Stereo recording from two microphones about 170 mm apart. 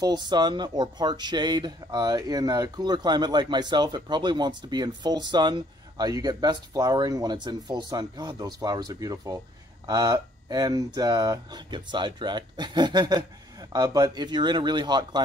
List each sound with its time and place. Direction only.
0.0 s speech: 25° right (ahead or behind)